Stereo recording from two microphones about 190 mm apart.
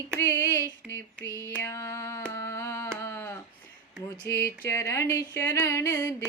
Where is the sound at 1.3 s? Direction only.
15° right (ahead or behind).